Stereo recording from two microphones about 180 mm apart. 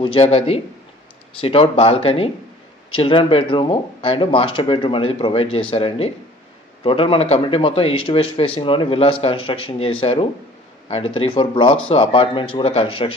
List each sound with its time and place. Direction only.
0.0 s a man's voice: 30° left (ahead or behind)